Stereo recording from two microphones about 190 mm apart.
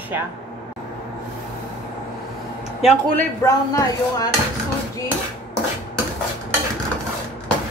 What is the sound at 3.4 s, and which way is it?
Speech, 15° left (ahead or behind).